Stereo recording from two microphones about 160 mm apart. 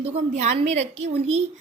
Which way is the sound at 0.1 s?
45° right (ahead or behind).